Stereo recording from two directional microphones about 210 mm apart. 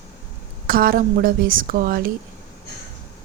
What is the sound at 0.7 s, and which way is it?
Speech, 45° right (ahead or behind).